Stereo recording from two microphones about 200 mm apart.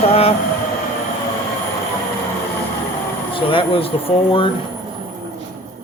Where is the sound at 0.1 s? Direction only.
30° left (ahead or behind).